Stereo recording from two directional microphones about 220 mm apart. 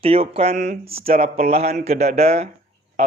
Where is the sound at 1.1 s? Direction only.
40° right (ahead or behind).